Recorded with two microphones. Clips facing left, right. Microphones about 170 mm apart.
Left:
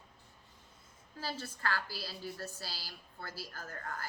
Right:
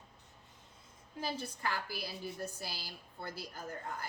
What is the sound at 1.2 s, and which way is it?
A woman's voice, 15° right (ahead or behind).